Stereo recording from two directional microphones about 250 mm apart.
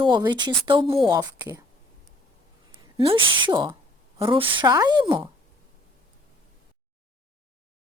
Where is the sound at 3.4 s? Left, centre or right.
Centre.